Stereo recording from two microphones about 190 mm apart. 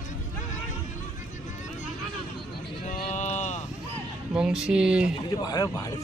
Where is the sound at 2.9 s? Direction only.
40° left (ahead or behind).